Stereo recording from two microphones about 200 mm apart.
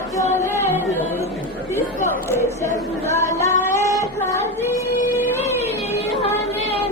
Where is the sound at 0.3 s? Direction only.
10° left (ahead or behind).